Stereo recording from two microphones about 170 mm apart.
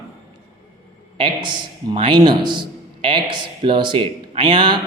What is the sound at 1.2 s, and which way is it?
Speech, 30° right (ahead or behind).